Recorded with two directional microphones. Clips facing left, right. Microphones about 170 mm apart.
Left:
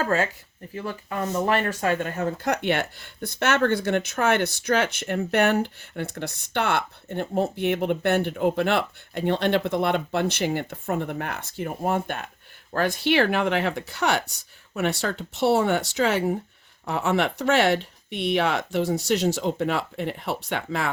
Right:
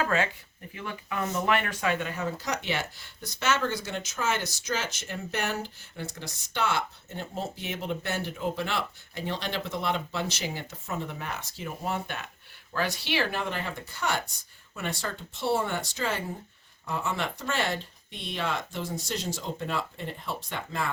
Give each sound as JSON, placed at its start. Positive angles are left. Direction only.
{"t": 0.0, "sound": "speech", "side_deg": 40}